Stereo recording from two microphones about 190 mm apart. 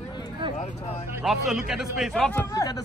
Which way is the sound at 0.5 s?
35° left (ahead or behind).